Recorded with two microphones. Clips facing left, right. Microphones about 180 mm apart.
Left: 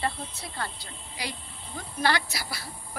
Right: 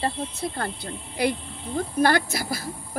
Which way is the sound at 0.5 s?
55° right (ahead or behind).